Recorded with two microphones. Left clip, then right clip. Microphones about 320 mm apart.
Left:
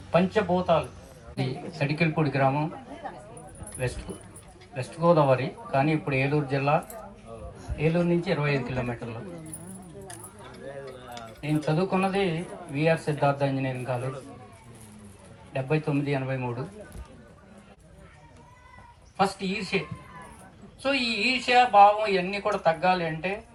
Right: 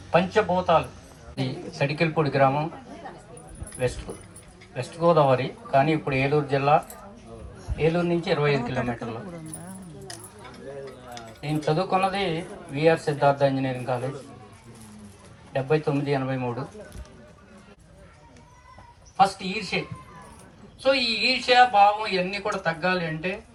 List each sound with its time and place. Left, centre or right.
0.1 s speech: right
1.8 s speech: right
3.8 s speech: right
7.9 s speech: right
11.3 s speech: right
15.5 s speech: right
19.1 s speech: centre
20.8 s speech: centre